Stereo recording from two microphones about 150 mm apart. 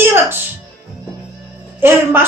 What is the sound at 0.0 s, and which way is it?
Music, 15° right (ahead or behind).